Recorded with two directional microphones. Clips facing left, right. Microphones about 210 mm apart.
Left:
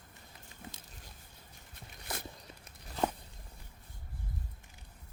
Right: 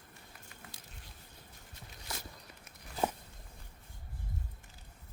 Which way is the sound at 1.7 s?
55° left (ahead or behind).